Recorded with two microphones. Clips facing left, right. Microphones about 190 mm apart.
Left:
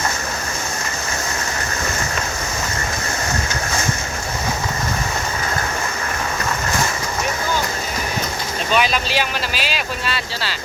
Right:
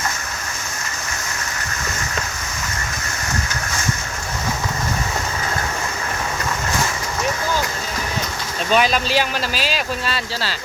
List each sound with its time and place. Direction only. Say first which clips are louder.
8.7 s speech: right 2 dB; 40° right (ahead or behind)